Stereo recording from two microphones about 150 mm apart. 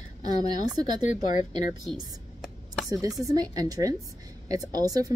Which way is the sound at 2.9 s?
25° right (ahead or behind).